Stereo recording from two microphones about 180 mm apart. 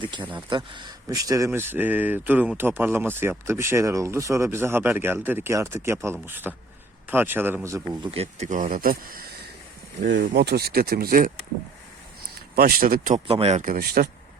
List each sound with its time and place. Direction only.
0.0 s speech: 25° right (ahead or behind)
8.1 s speech: 35° right (ahead or behind); by 9.2 s 55° right (ahead or behind)
10.2 s speech: 65° right (ahead or behind)
12.5 s speech: 55° right (ahead or behind)
13.1 s speech: 35° right (ahead or behind); by 14.1 s 55° right (ahead or behind)